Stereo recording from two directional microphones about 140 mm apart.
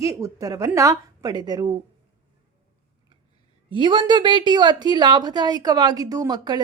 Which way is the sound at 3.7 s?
35° right (ahead or behind).